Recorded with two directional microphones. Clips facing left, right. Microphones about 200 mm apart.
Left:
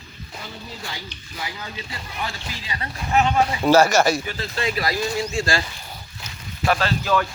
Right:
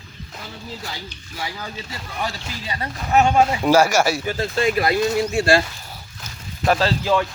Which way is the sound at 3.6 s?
10° right (ahead or behind).